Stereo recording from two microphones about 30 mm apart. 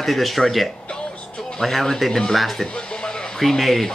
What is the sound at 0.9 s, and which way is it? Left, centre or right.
Music, left.